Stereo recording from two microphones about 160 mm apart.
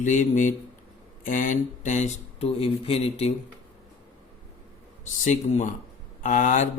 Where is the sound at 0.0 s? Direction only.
50° left (ahead or behind).